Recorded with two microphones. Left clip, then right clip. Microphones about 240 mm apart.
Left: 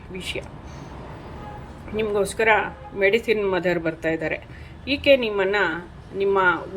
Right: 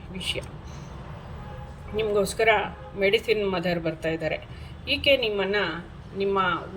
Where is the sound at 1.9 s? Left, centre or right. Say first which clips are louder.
Left 1 dB; centre.